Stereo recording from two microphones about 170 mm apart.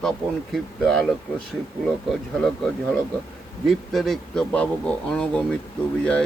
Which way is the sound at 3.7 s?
Centre (ahead or behind).